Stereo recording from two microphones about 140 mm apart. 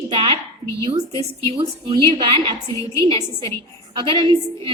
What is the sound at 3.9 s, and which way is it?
Speech, 35° right (ahead or behind).